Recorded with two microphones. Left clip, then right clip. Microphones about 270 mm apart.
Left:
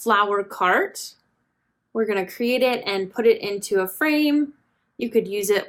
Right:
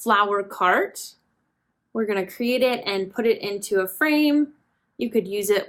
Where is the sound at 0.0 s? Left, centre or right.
Centre.